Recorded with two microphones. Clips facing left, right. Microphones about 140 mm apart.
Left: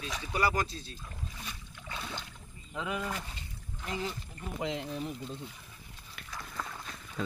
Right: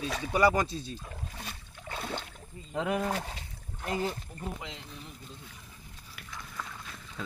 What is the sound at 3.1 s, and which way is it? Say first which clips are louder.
Speech: right 5 dB; 75° right (ahead or behind).